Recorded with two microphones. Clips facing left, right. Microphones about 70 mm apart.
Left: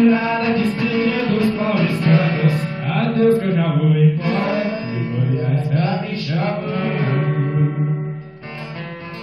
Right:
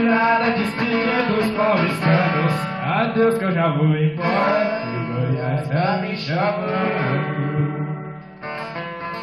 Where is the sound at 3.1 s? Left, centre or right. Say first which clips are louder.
Left 4 dB; right.